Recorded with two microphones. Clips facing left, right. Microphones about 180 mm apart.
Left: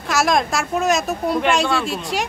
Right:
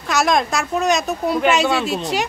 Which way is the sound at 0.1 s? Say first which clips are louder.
Right 1 dB; centre (ahead or behind).